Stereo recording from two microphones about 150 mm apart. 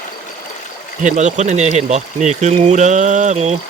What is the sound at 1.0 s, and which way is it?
Speech, 55° right (ahead or behind).